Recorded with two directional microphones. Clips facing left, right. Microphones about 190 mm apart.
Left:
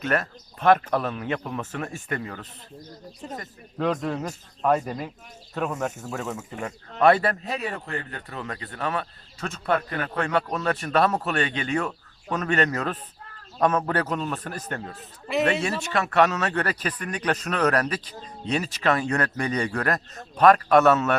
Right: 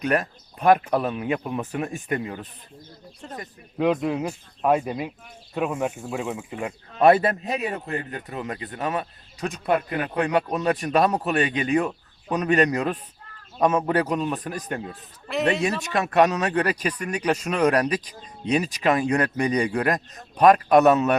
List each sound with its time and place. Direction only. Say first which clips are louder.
0.0 s a man's voice: right 2 dB; 15° right (ahead or behind)
6.6 s a man's voice: right 2 dB; 20° right (ahead or behind)
15.3 s speech: left 2 dB; centre (ahead or behind)
15.6 s a man's voice: right 2 dB; 15° right (ahead or behind)